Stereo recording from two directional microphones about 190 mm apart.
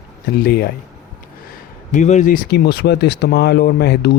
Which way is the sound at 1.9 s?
40° left (ahead or behind).